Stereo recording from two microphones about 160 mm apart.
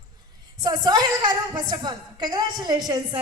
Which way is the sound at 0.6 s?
25° right (ahead or behind).